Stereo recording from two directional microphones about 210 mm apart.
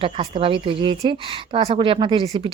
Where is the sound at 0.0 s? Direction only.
25° right (ahead or behind).